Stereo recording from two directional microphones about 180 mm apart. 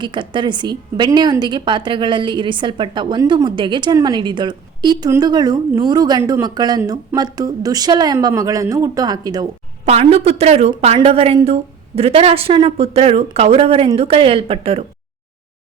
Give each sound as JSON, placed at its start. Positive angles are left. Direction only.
{"t": 0.0, "sound": "a woman's voice", "side_deg": -25}
{"t": 9.8, "sound": "a woman's voice", "side_deg": -35}